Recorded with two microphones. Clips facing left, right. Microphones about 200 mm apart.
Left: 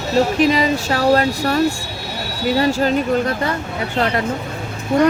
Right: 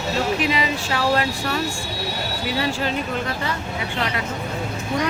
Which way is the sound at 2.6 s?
45° left (ahead or behind).